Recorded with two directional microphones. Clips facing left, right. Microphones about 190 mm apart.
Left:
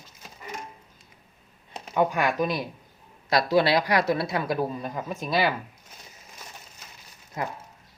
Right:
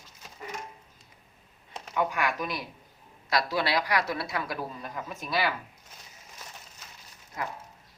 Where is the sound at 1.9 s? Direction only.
30° left (ahead or behind).